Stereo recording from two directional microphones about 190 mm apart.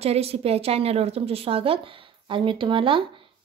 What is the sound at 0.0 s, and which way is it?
A woman's voice, 30° right (ahead or behind).